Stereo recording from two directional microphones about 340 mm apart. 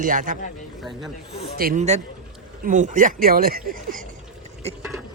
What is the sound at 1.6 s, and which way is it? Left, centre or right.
A man's voice, right.